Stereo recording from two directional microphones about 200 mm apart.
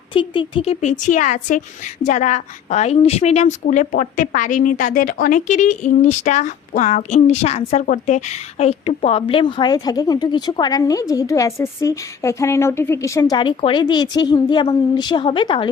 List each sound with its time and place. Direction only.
0.1 s a woman's voice: 25° left (ahead or behind)